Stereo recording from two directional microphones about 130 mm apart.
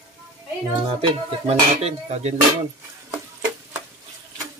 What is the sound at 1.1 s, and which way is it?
Speech, 50° right (ahead or behind).